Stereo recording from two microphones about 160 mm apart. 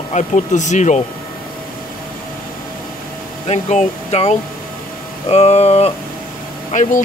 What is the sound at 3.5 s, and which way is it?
Speech, 45° left (ahead or behind).